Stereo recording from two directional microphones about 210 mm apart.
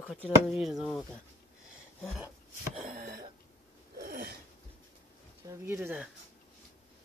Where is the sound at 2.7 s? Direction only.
35° right (ahead or behind).